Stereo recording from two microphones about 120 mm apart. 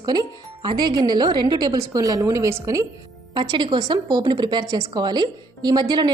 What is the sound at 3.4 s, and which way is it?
A woman's voice, 40° right (ahead or behind).